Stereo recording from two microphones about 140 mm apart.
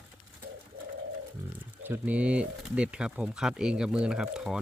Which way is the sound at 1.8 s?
15° right (ahead or behind).